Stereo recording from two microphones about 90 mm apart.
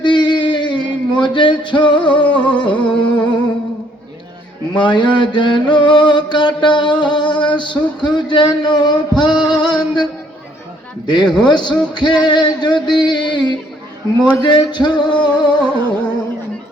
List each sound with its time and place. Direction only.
0.0 s a sound: 60° left (ahead or behind)
2.2 s music: 15° left (ahead or behind)
4.7 s music: 60° left (ahead or behind)
11.0 s a man's voice: 55° left (ahead or behind)
11.3 s music: 55° left (ahead or behind)
15.6 s music: 15° left (ahead or behind)